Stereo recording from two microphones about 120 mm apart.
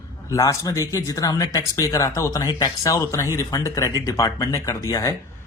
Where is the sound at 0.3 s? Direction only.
30° left (ahead or behind).